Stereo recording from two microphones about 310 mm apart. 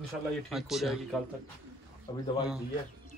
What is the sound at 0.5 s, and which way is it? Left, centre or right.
Speech, centre.